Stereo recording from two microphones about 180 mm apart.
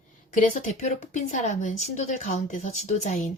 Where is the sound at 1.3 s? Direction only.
40° left (ahead or behind).